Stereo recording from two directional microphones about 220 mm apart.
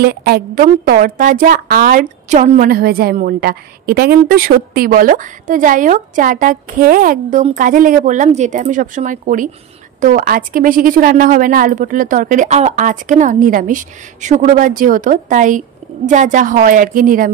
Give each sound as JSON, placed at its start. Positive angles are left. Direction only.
{"t": 0.0, "sound": "a woman's voice", "side_deg": -45}